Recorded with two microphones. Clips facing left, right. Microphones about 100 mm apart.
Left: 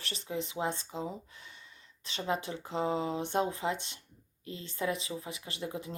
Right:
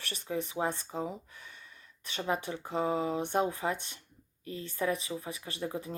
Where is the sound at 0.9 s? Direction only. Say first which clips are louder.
Right 2 dB; 45° right (ahead or behind).